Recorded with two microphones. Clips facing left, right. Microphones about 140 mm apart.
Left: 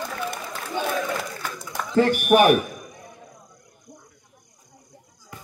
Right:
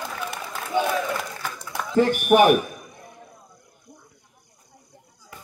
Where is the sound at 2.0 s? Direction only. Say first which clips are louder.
Even; 15° right (ahead or behind).